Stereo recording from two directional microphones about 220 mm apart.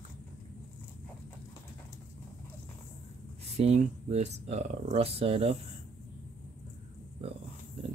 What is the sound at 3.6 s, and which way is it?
Speech, 30° right (ahead or behind).